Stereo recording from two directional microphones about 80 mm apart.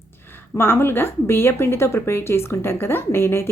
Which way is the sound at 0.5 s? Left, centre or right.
Left.